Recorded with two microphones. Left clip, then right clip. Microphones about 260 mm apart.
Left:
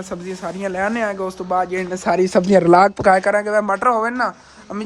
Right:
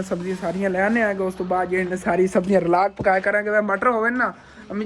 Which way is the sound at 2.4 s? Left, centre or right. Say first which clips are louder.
Left 10 dB; left.